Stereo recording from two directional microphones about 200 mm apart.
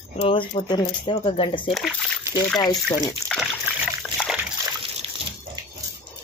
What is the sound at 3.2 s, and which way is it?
Water, centre (ahead or behind).